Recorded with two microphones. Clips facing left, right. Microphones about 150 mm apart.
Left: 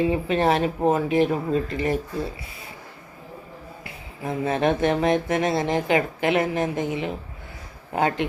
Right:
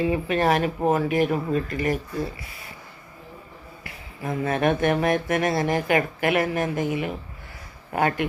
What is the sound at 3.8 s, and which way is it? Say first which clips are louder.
Speech: even; 20° left (ahead or behind).